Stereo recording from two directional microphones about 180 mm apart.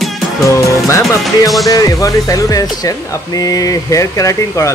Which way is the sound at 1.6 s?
20° left (ahead or behind).